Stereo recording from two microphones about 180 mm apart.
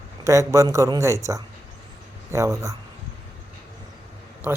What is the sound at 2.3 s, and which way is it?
Speech, 15° right (ahead or behind).